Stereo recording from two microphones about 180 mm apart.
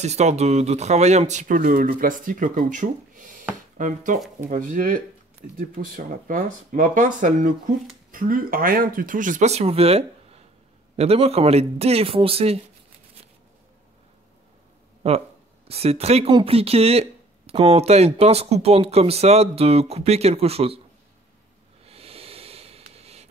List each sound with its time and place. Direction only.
0.0 s speech: 40° right (ahead or behind)
15.0 s speech: 35° right (ahead or behind)
21.8 s a sound: 35° right (ahead or behind)